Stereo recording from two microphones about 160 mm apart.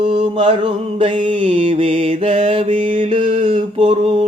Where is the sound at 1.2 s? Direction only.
35° right (ahead or behind).